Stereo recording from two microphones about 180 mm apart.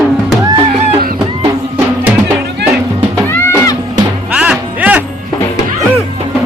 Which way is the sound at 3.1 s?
10° left (ahead or behind).